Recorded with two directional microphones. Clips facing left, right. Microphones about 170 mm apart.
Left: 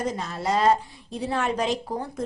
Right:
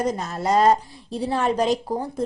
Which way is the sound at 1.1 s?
35° right (ahead or behind).